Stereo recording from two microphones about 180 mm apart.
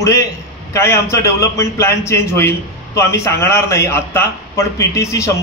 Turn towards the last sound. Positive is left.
turn(degrees=15)  # may be behind; listen again after turning